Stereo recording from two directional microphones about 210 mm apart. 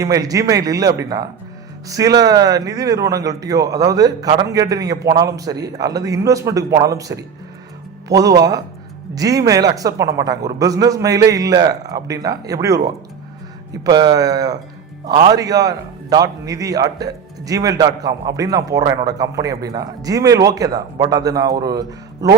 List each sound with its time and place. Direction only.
0.0 s a man's voice: 15° right (ahead or behind)